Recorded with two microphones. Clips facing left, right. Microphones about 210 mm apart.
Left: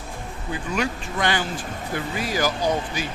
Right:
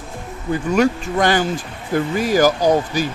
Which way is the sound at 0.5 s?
45° right (ahead or behind).